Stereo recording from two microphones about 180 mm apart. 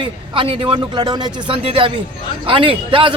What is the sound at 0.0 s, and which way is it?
A man's voice, 30° right (ahead or behind).